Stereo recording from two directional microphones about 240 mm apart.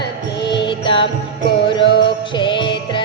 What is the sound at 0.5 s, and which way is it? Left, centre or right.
Music, centre.